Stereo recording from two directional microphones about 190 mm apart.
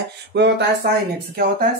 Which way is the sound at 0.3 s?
65° right (ahead or behind).